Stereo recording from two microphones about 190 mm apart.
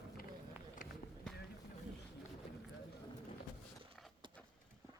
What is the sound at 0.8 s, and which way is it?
Run, 45° left (ahead or behind).